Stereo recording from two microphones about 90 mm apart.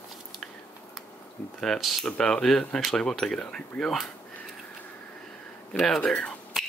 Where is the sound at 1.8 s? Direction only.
Centre (ahead or behind).